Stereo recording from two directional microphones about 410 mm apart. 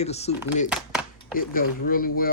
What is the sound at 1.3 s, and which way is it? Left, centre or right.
Speech, left.